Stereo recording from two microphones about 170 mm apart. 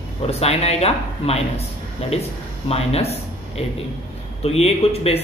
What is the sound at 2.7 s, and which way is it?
Speech, 35° left (ahead or behind).